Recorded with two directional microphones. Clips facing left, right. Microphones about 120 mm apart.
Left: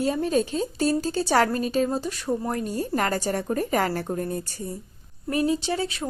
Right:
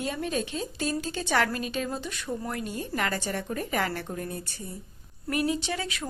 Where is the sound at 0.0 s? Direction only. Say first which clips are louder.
Left 7 dB; 35° left (ahead or behind).